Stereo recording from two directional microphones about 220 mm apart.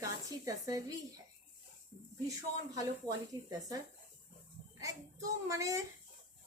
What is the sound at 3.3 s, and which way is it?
Speech, 15° right (ahead or behind).